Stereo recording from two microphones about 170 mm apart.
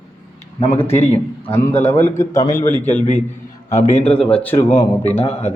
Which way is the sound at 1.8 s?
15° left (ahead or behind).